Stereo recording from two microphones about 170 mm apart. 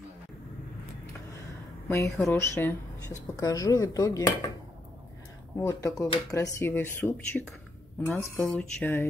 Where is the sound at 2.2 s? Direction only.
15° left (ahead or behind).